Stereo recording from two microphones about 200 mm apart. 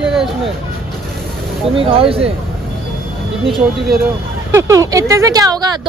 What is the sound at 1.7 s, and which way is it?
Speech, 30° right (ahead or behind).